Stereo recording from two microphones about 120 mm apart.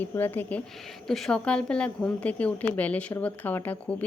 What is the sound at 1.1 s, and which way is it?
Speech, 5° left (ahead or behind).